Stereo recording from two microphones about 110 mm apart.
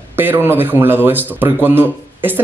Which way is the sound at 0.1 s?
20° right (ahead or behind).